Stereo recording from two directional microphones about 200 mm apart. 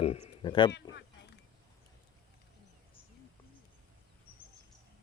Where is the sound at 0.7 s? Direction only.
60° left (ahead or behind).